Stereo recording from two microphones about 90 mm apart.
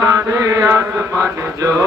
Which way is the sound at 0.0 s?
40° right (ahead or behind).